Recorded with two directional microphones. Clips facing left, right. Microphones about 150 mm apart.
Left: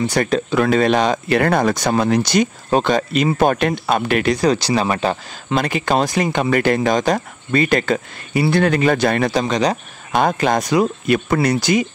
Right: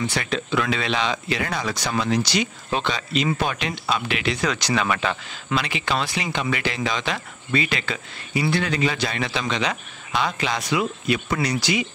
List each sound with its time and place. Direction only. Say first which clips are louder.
0.0 s speech: left 8 dB; 45° left (ahead or behind)